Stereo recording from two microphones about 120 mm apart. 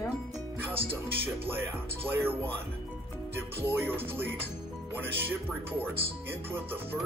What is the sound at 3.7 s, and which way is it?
Speech, 20° right (ahead or behind).